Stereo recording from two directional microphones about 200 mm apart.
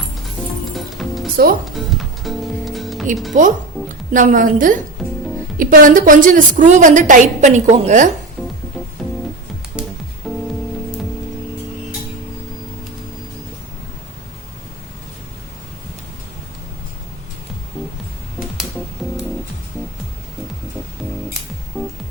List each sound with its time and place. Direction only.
0.9 s music: centre (ahead or behind)
3.3 s a woman's voice: 40° right (ahead or behind)
5.0 s music: centre (ahead or behind)
5.5 s a woman's voice: 45° right (ahead or behind)
10.3 s music: centre (ahead or behind)